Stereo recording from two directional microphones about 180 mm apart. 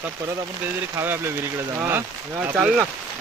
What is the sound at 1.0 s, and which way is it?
Speech, 15° right (ahead or behind).